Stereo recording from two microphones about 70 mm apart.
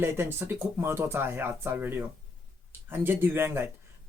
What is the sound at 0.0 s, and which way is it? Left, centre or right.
Speech, right.